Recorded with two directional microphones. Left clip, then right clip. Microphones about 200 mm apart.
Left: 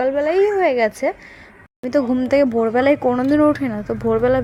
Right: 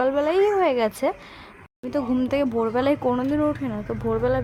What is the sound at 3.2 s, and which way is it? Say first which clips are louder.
Speech: left 8 dB; 25° left (ahead or behind).